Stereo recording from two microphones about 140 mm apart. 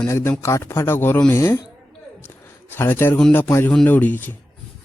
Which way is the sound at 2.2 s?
15° left (ahead or behind).